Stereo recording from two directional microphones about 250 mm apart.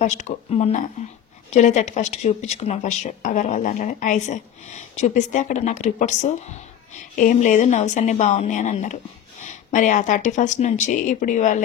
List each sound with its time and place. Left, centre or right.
0.0 s speech: left